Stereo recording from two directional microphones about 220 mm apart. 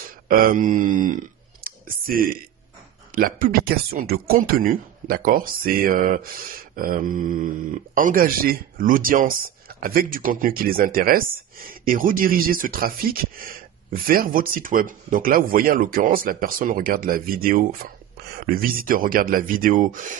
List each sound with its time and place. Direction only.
0.3 s speech: 40° right (ahead or behind)